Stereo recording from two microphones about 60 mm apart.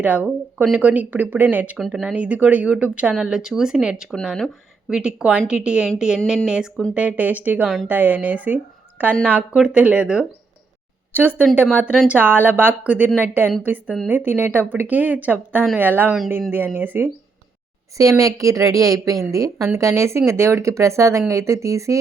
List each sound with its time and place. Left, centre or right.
0.0 s a woman's voice: right
1.9 s speech: centre
2.1 s a woman's voice: right
6.9 s a woman's voice: right
9.6 s speech: centre
11.1 s a woman's voice: right
17.9 s a woman's voice: right
19.7 s speech: right